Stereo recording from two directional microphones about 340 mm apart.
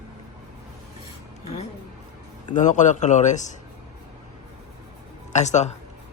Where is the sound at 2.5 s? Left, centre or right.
Left.